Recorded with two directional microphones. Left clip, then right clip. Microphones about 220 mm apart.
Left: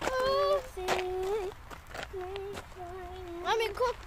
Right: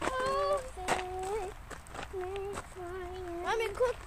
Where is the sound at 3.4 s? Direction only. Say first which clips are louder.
Left 2 dB; 30° left (ahead or behind).